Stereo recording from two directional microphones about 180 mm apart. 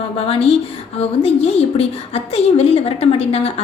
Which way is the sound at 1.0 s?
35° left (ahead or behind).